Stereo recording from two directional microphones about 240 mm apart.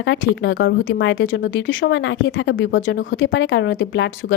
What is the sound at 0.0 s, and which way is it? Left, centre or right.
Speech, left.